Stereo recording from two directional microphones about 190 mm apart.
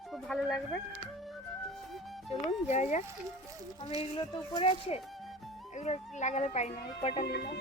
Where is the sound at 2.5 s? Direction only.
35° left (ahead or behind).